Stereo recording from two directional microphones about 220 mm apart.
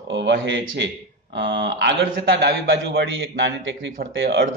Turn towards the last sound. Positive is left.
turn(degrees=-55)  # may be behind; listen again after turning